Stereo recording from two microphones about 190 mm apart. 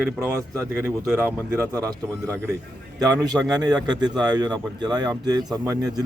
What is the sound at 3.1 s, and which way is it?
Speech, 20° right (ahead or behind).